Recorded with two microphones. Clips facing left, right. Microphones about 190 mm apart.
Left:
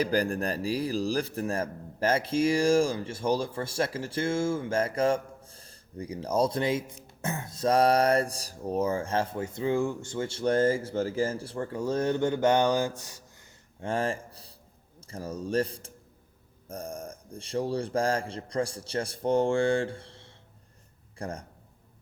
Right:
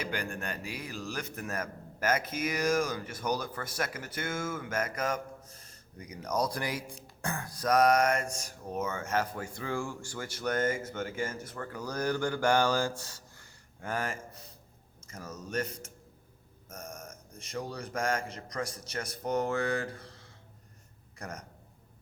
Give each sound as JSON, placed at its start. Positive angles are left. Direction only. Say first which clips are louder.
{"t": 0.0, "sound": "a man's voice", "louder": "left 9 dB", "side_deg": 35}